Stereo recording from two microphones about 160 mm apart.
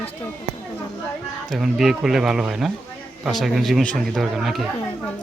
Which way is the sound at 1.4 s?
Centre (ahead or behind).